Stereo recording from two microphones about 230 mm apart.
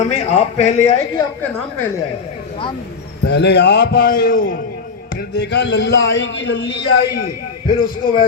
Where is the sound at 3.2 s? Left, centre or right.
Left.